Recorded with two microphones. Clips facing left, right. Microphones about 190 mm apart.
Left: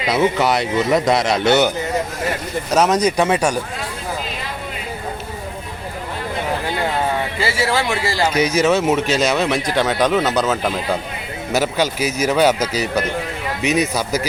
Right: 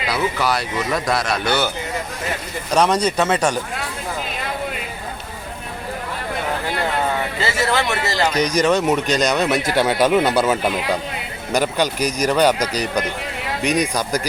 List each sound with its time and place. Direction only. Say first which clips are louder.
0.1 s a man's voice: left 5 dB; 20° left (ahead or behind)
2.7 s speech: left 1 dB; 10° left (ahead or behind)
7.6 s speech: left 1 dB; 10° left (ahead or behind); by 10.7 s 10° right (ahead or behind)
11.5 s speech: even; 5° left (ahead or behind)